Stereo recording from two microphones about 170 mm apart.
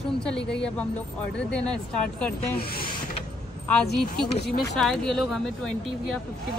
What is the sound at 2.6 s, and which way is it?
Vehicle, 60° left (ahead or behind).